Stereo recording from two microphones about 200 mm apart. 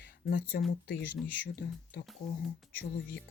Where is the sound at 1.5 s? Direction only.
50° left (ahead or behind).